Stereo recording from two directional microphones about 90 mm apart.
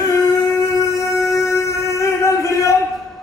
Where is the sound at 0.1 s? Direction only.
35° left (ahead or behind).